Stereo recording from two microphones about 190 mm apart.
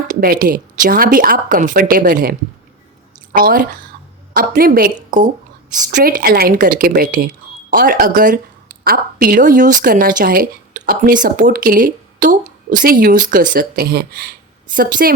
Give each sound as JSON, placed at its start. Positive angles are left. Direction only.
{"t": 0.1, "sound": "a woman's voice", "side_deg": -50}
{"t": 3.3, "sound": "a woman's voice", "side_deg": -50}